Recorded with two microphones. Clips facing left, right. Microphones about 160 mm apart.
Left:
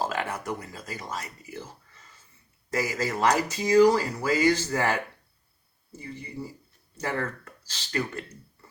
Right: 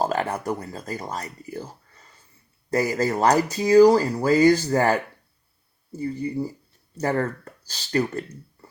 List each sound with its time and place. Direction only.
0.0 s speech: 40° right (ahead or behind)